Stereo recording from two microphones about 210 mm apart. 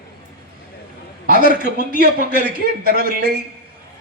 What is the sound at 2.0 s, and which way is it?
A man's voice, 45° right (ahead or behind).